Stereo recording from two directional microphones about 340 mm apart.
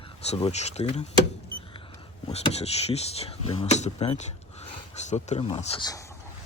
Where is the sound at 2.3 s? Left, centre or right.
Centre.